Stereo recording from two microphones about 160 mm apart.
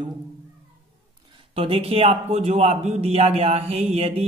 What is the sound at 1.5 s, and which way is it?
Speech, 35° right (ahead or behind).